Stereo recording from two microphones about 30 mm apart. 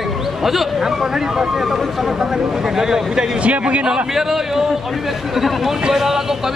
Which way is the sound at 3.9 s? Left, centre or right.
Centre.